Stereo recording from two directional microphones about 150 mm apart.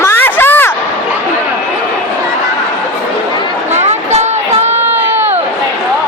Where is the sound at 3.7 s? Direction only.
50° right (ahead or behind).